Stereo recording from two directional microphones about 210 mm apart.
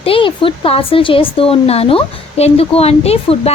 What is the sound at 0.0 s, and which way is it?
Speech, 25° left (ahead or behind).